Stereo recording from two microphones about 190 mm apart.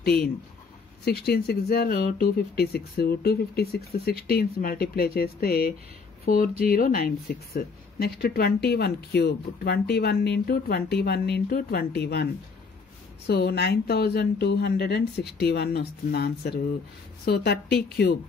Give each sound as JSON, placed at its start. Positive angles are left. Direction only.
{"t": 0.0, "sound": "speech", "side_deg": 55}
{"t": 13.3, "sound": "speech", "side_deg": 60}